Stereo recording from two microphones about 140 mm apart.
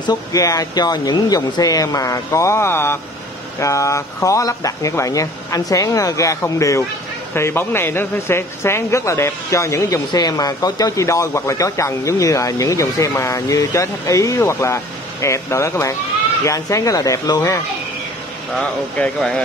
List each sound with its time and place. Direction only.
0.0 s speech: 25° left (ahead or behind)
18.6 s speech: 10° left (ahead or behind)